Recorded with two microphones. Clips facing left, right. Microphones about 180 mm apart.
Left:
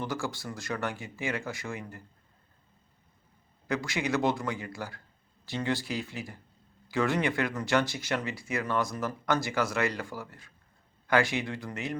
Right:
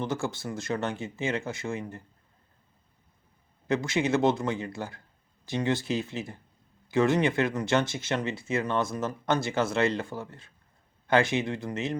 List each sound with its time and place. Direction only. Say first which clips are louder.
0.0 s speech: right 3 dB; 25° right (ahead or behind)
3.7 s speech: right 4 dB; 25° right (ahead or behind)